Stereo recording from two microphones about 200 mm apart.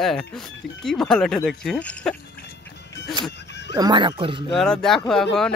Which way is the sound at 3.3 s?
60° left (ahead or behind).